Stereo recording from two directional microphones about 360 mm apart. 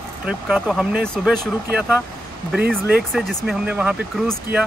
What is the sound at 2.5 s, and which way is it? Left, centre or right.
Speech, centre.